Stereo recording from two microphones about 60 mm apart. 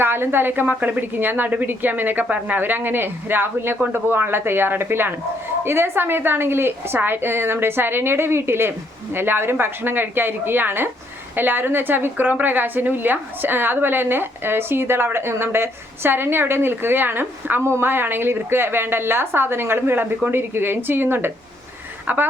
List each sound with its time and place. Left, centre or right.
0.0 s a woman's voice: right